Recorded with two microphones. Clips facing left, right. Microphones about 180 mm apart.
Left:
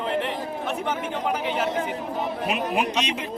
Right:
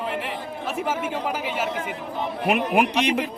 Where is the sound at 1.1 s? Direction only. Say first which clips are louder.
Left 1 dB; 5° right (ahead or behind).